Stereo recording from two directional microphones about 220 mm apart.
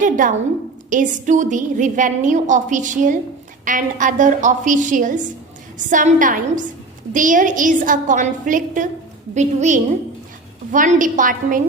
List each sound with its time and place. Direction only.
0.0 s a woman's voice: 35° right (ahead or behind)